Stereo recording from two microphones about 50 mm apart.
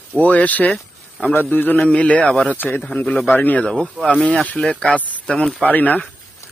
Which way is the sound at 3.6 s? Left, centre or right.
Centre.